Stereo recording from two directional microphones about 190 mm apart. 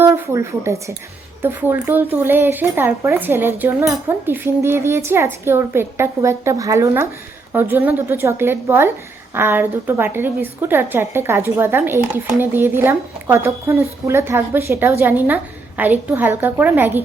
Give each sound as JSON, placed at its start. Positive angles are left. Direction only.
{"t": 0.0, "sound": "a woman's voice", "side_deg": -15}